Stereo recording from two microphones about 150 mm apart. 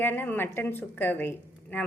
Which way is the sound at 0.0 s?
15° left (ahead or behind).